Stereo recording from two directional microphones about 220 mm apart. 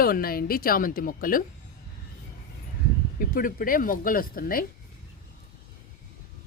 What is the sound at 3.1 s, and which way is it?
Speech, 40° left (ahead or behind).